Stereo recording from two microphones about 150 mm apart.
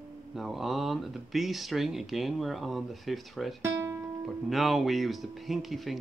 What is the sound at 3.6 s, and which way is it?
Music, 20° right (ahead or behind).